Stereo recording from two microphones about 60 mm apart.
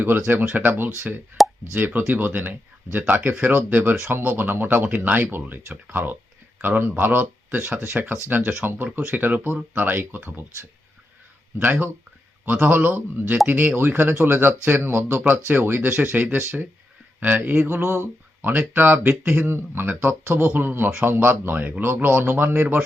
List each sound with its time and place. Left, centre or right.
0.3 s speech: right
1.4 s plop: centre
1.7 s speech: right
11.6 s speech: right
17.5 s a sound: right
18.4 s speech: right